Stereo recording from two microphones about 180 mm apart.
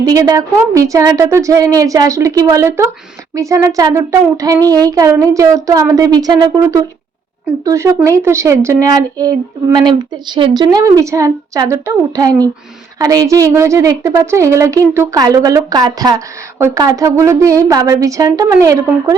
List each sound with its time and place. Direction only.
0.0 s a woman's voice: 20° right (ahead or behind)